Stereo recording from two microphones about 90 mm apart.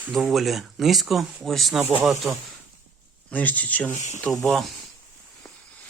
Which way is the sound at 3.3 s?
15° left (ahead or behind).